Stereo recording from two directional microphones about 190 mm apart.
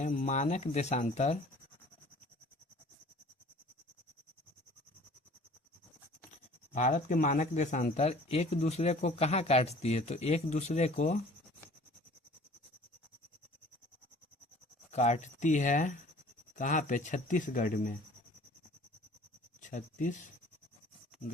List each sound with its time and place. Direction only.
0.0 s speech: 40° left (ahead or behind)
6.7 s speech: 40° left (ahead or behind)
14.8 s speech: 35° left (ahead or behind)
19.6 s speech: 40° left (ahead or behind)